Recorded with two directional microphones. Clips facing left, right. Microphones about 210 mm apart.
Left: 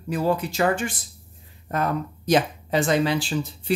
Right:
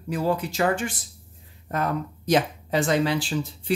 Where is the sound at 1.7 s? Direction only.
40° left (ahead or behind).